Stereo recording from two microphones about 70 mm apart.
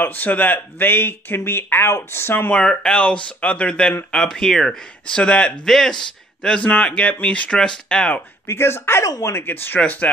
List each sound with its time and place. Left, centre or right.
0.0 s speech: left
2.5 s speech: centre
6.6 s speech: centre
8.5 s speech: left; by 10.1 s centre